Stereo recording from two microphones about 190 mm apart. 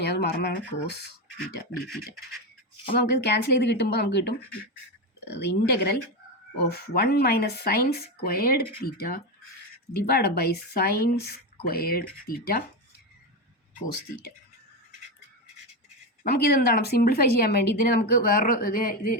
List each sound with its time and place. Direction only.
0.0 s speech: 60° left (ahead or behind)
2.9 s speech: 60° left (ahead or behind)
16.2 s speech: 55° left (ahead or behind)